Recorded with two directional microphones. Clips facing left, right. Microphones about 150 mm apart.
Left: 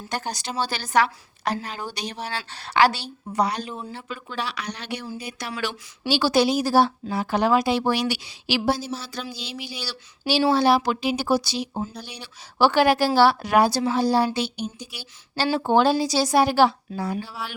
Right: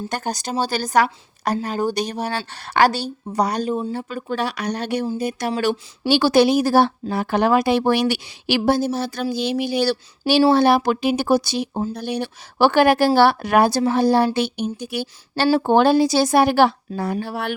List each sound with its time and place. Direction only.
0.1 s speech: 50° right (ahead or behind)
6.1 s speech: 55° right (ahead or behind)